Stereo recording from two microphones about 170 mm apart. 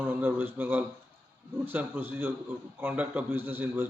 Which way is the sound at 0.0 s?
10° right (ahead or behind).